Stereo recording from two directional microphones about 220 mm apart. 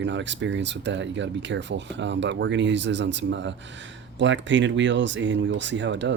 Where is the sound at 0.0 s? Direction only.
55° right (ahead or behind).